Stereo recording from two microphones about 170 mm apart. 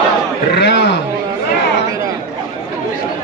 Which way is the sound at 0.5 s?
90° left.